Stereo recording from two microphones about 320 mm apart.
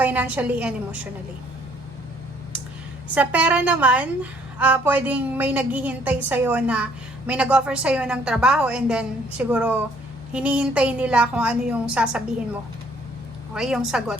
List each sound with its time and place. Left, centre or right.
0.0 s a woman's voice: centre
3.2 s a woman's voice: centre
13.5 s a woman's voice: centre